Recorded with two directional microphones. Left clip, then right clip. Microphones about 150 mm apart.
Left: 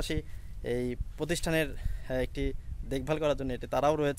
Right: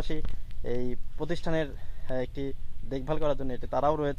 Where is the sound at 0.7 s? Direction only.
30° left (ahead or behind).